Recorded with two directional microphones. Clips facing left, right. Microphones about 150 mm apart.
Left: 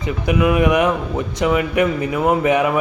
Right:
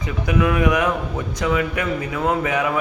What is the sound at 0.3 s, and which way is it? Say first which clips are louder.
A man's voice: left 3 dB; 15° left (ahead or behind).